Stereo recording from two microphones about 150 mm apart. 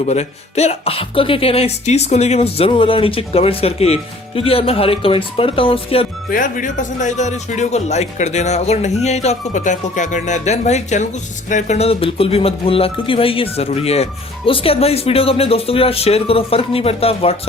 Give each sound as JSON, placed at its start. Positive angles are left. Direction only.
{"t": 0.0, "sound": "speech", "side_deg": 45}
{"t": 6.3, "sound": "speech", "side_deg": 60}